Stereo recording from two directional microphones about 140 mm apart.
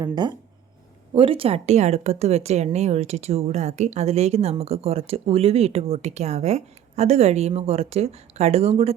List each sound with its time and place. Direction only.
0.0 s speech: 30° right (ahead or behind); by 9.0 s 45° right (ahead or behind)